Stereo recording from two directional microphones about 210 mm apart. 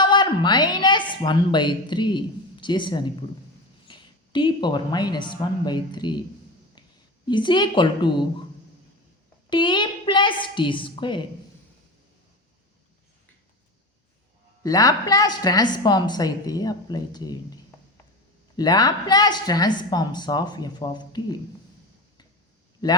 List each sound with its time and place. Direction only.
0.0 s a woman's voice: 20° left (ahead or behind)
7.3 s a woman's voice: 20° left (ahead or behind)
9.5 s a woman's voice: 20° left (ahead or behind)
14.6 s a woman's voice: 15° left (ahead or behind)
22.8 s a woman's voice: 20° left (ahead or behind)